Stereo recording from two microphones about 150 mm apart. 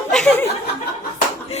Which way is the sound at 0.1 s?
5° left (ahead or behind).